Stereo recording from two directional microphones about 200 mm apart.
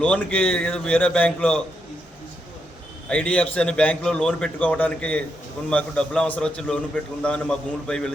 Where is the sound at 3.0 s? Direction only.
5° left (ahead or behind).